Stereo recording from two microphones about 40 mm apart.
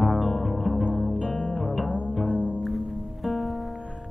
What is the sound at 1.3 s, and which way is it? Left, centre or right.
Music, left.